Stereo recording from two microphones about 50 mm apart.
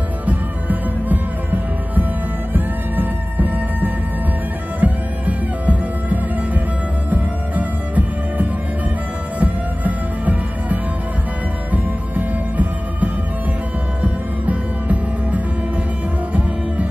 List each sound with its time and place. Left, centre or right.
0.2 s music: right